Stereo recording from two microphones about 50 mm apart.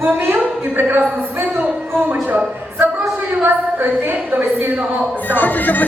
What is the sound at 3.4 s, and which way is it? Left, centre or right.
A woman's voice, right.